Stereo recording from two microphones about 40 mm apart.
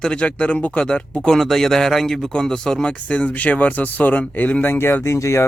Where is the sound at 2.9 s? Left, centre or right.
Left.